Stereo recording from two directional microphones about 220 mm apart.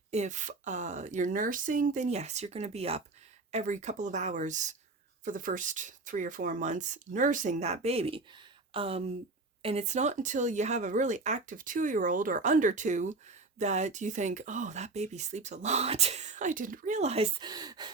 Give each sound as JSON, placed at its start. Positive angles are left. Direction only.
{"t": 0.1, "sound": "speech", "side_deg": -30}